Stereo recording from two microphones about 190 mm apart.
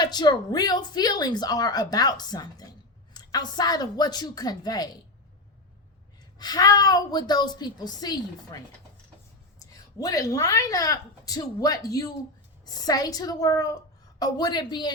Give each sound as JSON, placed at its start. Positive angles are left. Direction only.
{"t": 0.0, "sound": "speech", "side_deg": 20}
{"t": 6.4, "sound": "speech", "side_deg": 20}
{"t": 9.6, "sound": "a woman's voice", "side_deg": 20}